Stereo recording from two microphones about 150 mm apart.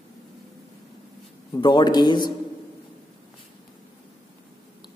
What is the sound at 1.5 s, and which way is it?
Speech, 30° left (ahead or behind).